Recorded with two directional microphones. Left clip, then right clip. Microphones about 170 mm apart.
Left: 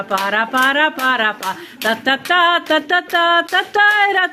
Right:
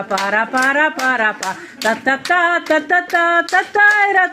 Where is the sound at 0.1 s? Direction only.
Centre (ahead or behind).